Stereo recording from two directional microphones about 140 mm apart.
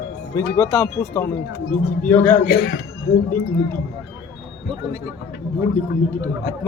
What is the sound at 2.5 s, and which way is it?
Speech, 90° left.